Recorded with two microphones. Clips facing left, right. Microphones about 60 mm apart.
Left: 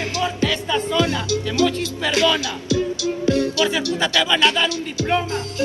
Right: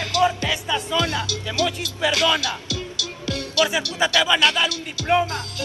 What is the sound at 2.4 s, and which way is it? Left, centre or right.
Music, left.